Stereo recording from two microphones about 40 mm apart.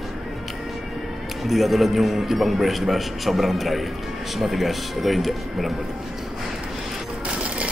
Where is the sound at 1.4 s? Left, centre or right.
Centre.